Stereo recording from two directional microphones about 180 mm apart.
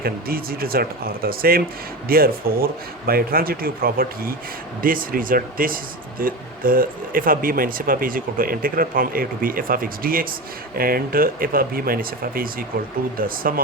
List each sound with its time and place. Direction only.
0.0 s speech: 55° right (ahead or behind)